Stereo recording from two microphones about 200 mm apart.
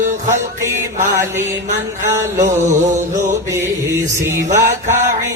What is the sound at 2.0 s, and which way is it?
Music, 15° right (ahead or behind).